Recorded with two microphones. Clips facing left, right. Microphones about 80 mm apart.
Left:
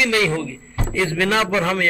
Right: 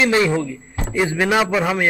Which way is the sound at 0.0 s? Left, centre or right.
Right.